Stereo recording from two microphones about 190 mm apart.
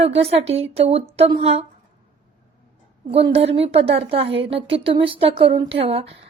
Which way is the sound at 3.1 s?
30° right (ahead or behind).